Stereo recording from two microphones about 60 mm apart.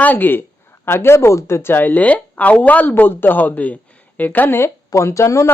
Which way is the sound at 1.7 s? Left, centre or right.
Left.